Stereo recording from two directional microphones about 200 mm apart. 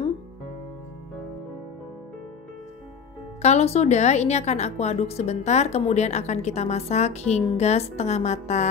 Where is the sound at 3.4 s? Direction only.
35° left (ahead or behind).